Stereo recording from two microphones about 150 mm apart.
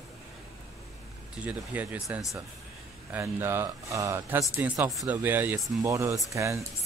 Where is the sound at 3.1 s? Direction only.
15° right (ahead or behind).